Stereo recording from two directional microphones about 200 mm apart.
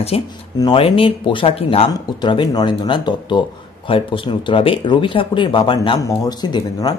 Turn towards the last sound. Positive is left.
turn(degrees=20)  # may be behind; listen again after turning